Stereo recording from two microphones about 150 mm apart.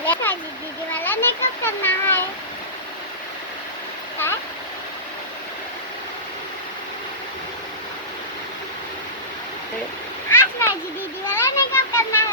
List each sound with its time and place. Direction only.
0.0 s children playing: 10° left (ahead or behind)
10.2 s splash: 15° left (ahead or behind)
11.3 s a sound: 15° left (ahead or behind)